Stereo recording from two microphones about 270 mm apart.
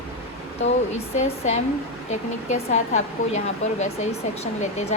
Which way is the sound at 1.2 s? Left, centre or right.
Left.